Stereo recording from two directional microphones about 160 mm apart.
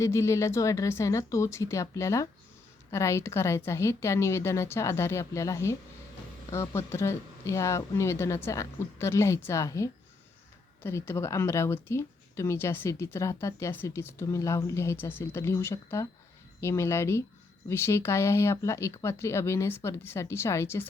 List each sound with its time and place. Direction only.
0.0 s speech: 20° left (ahead or behind)